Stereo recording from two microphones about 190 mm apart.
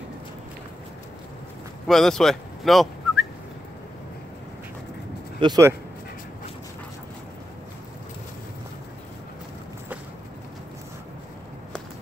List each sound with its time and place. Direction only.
1.9 s speech: centre (ahead or behind)
5.4 s speech: 20° right (ahead or behind)